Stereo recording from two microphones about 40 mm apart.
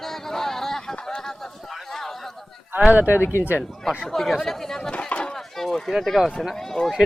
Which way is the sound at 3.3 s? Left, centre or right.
Left.